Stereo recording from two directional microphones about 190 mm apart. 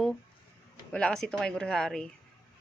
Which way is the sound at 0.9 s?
5° left (ahead or behind).